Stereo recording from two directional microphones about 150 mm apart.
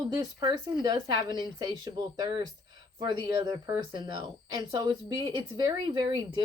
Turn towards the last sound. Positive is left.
turn(degrees=-35)  # may be behind; listen again after turning